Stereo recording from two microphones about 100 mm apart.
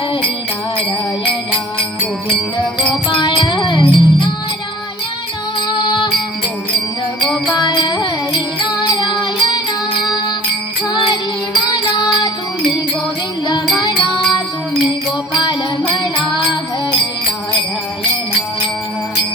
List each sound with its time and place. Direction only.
0.8 s music: 60° left (ahead or behind)
5.6 s music: 50° left (ahead or behind)
7.2 s music: 5° left (ahead or behind)
7.6 s music: 50° left (ahead or behind)
10.8 s music: 45° left (ahead or behind)
13.7 s music: 50° left (ahead or behind)